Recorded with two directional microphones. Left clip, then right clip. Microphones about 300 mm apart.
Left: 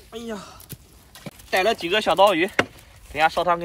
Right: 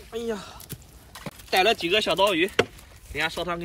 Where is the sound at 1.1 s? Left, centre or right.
Centre.